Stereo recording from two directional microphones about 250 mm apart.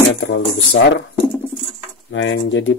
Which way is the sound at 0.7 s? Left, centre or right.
Left.